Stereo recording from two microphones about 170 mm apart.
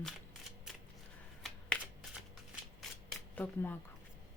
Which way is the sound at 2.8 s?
Centre (ahead or behind).